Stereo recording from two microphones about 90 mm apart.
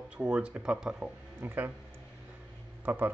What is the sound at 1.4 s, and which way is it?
Speech, 25° right (ahead or behind).